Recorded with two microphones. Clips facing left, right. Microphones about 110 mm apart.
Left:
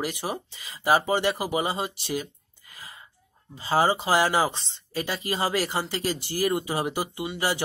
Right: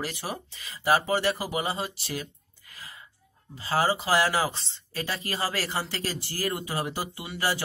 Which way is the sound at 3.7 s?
20° left (ahead or behind).